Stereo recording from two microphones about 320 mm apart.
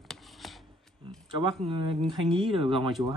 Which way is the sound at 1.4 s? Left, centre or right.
Centre.